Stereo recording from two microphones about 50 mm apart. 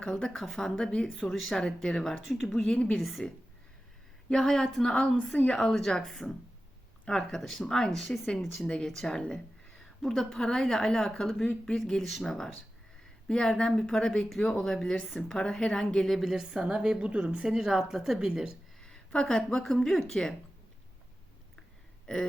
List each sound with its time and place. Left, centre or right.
0.0 s a woman's voice: centre
2.6 s a woman's voice: centre
3.0 s speech: centre
4.3 s a woman's voice: centre
8.6 s a woman's voice: centre
16.0 s speech: centre
16.4 s speech: centre
17.0 s speech: right
17.5 s speech: centre
18.8 s speech: centre
22.0 s a sound: centre